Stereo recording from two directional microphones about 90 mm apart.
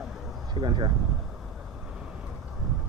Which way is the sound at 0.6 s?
55° right (ahead or behind).